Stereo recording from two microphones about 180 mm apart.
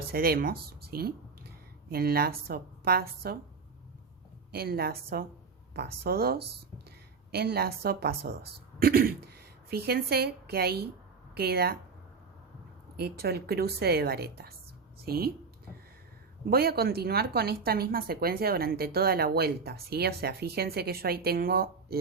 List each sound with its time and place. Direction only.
0.1 s speech: 55° right (ahead or behind)
4.5 s a woman's voice: 60° right (ahead or behind)
13.0 s speech: 60° right (ahead or behind)
16.5 s speech: 60° right (ahead or behind)